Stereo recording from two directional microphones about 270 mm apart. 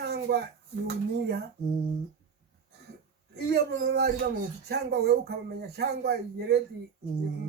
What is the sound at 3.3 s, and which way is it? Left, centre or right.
Speech, right.